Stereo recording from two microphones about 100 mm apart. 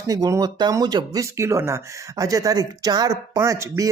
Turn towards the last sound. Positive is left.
turn(degrees=-30)  # may be behind; listen again after turning